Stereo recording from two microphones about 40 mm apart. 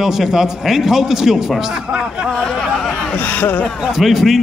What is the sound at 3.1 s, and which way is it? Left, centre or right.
Speech, left.